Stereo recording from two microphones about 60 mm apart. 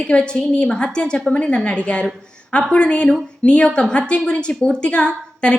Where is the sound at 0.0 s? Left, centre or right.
Centre.